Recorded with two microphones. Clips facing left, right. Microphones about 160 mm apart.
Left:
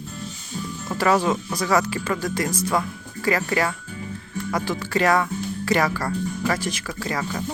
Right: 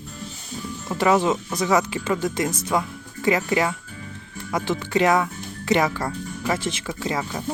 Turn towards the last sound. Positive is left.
turn(degrees=-20)  # may be behind; listen again after turning